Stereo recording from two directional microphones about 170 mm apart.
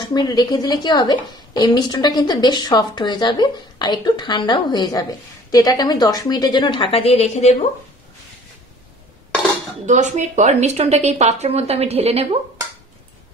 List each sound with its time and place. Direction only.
0.0 s a woman's voice: 25° left (ahead or behind)
9.8 s speech: 45° right (ahead or behind)